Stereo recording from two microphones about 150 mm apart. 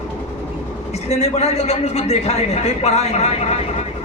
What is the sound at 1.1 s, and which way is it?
A man's voice, 45° left (ahead or behind).